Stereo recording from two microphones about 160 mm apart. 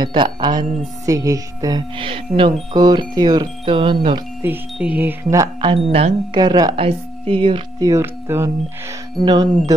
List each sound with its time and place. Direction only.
0.0 s speech: 30° right (ahead or behind)
4.4 s speech: 10° right (ahead or behind); by 7.9 s 30° right (ahead or behind)
7.9 s speech: 15° right (ahead or behind)
9.2 s speech: 25° right (ahead or behind)